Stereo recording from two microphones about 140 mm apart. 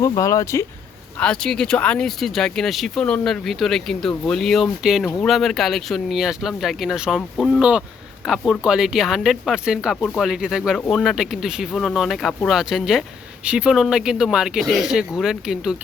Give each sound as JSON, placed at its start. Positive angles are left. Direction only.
{"t": 0.0, "sound": "speech", "side_deg": 25}
{"t": 1.2, "sound": "speech", "side_deg": 5}